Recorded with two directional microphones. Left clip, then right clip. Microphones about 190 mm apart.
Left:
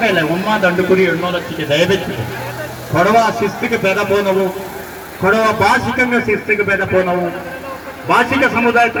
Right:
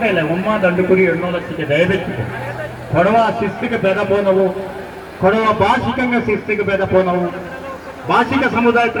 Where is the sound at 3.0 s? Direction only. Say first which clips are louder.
Left 1 dB; 25° right (ahead or behind).